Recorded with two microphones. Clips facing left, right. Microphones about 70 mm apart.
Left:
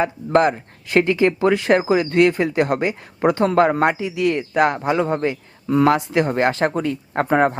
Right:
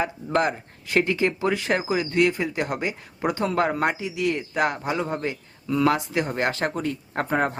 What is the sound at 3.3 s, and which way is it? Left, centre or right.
Speech, left.